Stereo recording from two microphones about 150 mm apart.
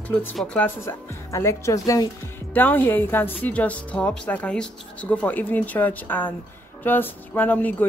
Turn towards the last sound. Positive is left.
turn(degrees=10)  # may be behind; listen again after turning